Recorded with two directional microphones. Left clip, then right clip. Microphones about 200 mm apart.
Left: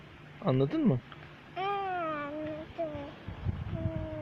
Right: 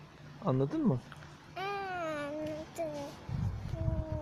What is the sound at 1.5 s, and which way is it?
Babbling, 30° right (ahead or behind).